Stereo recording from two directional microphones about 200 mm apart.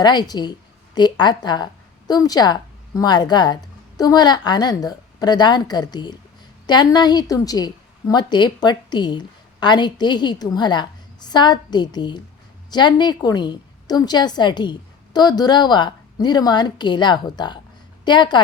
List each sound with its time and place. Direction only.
0.0 s a woman's voice: 20° left (ahead or behind)